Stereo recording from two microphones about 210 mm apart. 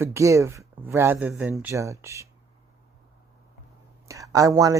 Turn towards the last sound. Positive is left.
turn(degrees=-15)  # may be behind; listen again after turning